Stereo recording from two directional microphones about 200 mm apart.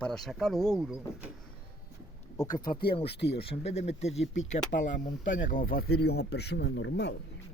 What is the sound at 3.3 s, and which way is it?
Speech, 30° left (ahead or behind).